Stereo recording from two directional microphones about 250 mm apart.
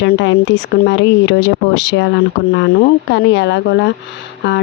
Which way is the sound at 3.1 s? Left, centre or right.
Left.